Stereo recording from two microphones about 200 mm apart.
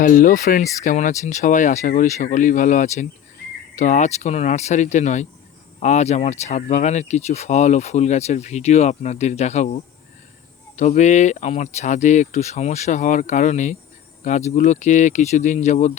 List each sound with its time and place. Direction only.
0.0 s speech: 45° left (ahead or behind)